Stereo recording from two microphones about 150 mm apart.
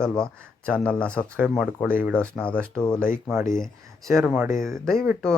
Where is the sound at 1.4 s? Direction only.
Centre (ahead or behind).